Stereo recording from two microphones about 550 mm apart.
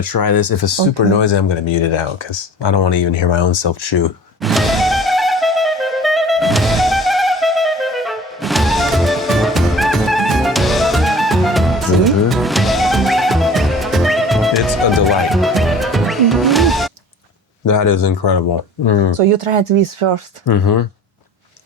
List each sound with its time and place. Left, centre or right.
0.0 s speech: left
0.9 s speech: left
4.4 s music: centre
17.7 s speech: left
19.1 s speech: right
20.4 s speech: left